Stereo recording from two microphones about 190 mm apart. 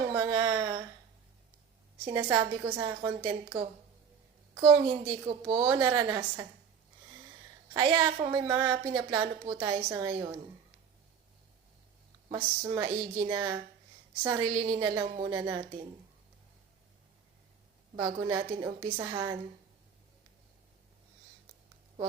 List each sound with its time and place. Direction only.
0.2 s speech: 25° right (ahead or behind)
0.5 s a sound: 10° right (ahead or behind)
2.3 s a woman's voice: 20° right (ahead or behind)
7.8 s a woman's voice: 20° right (ahead or behind)
12.3 s a woman's voice: 20° right (ahead or behind)
17.9 s a woman's voice: 20° right (ahead or behind)